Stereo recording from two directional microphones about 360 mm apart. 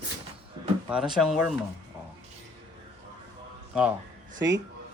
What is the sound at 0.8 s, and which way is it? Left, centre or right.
Speech, centre.